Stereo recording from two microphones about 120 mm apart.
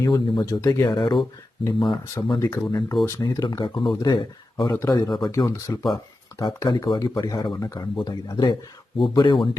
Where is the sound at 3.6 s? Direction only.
45° left (ahead or behind).